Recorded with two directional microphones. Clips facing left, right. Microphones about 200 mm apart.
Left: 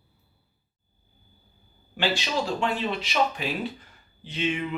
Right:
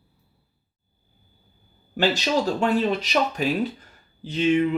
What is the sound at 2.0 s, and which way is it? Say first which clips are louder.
Speech: right 5 dB; 40° right (ahead or behind).